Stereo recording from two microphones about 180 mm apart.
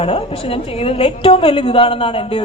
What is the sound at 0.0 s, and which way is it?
Speech, 30° left (ahead or behind).